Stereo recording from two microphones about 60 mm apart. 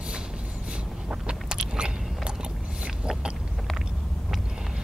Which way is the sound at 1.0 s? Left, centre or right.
Centre.